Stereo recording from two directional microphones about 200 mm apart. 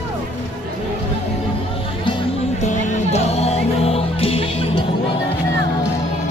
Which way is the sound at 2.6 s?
35° left (ahead or behind).